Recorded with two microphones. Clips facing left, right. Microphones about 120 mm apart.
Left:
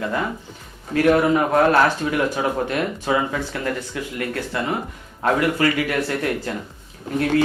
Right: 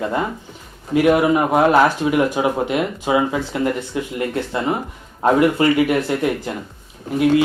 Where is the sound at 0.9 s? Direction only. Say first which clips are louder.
Right 2 dB; 15° right (ahead or behind).